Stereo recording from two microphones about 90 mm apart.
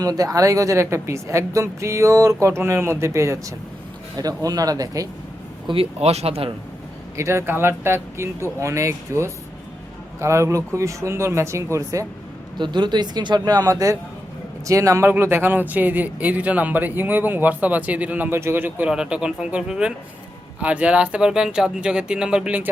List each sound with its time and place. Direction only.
0.0 s speech: 45° right (ahead or behind)
5.6 s speech: 90° right
7.2 s a man's voice: 30° right (ahead or behind)
12.5 s speech: 55° right (ahead or behind); by 15.1 s 35° right (ahead or behind)
15.1 s a man's voice: 25° right (ahead or behind)
18.9 s speech: 10° right (ahead or behind)